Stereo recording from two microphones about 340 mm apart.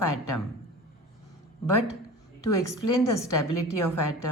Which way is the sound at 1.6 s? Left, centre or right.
Left.